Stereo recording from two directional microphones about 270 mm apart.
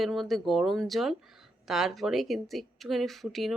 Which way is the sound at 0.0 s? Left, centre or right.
Centre.